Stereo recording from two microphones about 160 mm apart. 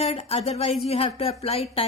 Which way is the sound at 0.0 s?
40° left (ahead or behind).